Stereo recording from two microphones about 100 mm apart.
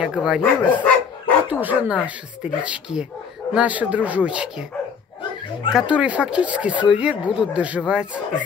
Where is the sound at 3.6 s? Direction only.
15° right (ahead or behind).